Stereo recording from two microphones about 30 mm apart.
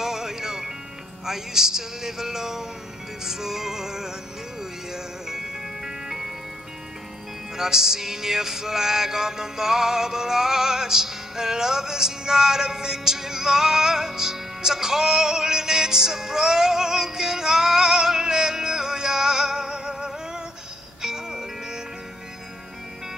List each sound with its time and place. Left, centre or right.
0.0 s music: centre
7.5 s music: centre